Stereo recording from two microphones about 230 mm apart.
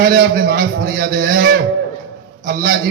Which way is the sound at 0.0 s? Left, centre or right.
Right.